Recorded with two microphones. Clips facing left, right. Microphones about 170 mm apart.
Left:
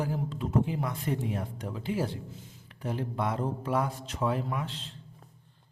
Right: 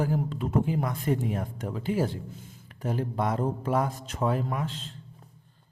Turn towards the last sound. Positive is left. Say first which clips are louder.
# right 3 dB
turn(degrees=-45)  # may be behind; listen again after turning